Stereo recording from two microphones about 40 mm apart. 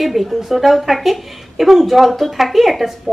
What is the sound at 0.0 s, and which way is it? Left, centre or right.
A woman's voice, centre.